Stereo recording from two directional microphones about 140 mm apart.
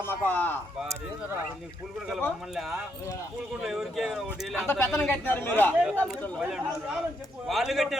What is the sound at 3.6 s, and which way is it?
Speech, 5° right (ahead or behind).